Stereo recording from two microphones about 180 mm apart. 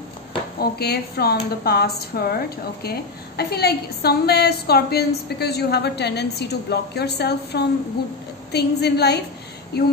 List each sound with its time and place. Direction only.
0.6 s speech: 60° left (ahead or behind)